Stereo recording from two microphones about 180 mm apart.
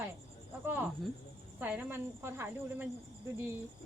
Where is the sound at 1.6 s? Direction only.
10° right (ahead or behind).